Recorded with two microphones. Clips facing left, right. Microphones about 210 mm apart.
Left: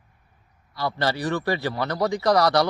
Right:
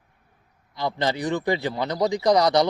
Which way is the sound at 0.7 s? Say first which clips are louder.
Even; 20° right (ahead or behind).